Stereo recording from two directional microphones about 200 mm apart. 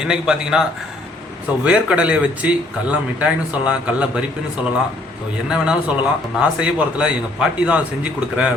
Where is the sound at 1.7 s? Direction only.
5° right (ahead or behind).